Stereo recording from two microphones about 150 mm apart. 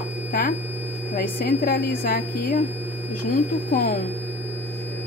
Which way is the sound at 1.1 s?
75° left (ahead or behind).